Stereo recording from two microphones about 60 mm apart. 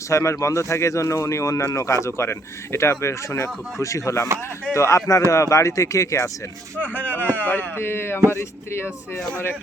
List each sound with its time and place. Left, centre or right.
0.1 s speech: left
6.7 s speech: left
7.8 s speech: left